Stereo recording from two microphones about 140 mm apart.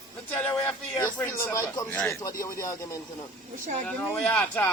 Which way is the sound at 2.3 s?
80° left.